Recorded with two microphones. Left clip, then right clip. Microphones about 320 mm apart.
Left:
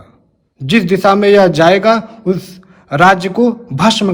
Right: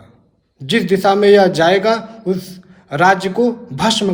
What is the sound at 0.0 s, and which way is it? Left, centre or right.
A man's voice, left.